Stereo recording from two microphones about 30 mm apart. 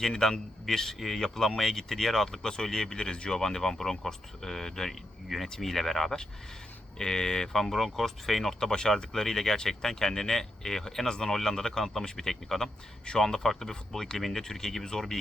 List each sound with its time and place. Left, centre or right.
0.1 s speech: centre
0.9 s speech: centre; by 3.3 s left
3.3 s speech: centre
7.0 s speech: left; by 8.5 s centre
8.5 s speech: left